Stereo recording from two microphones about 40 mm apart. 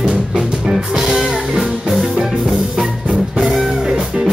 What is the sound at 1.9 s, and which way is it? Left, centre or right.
Music, centre.